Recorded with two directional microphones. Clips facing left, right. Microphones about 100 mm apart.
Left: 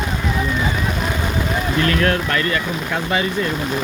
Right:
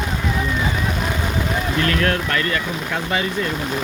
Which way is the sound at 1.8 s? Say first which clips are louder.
Left 3 dB; 20° left (ahead or behind).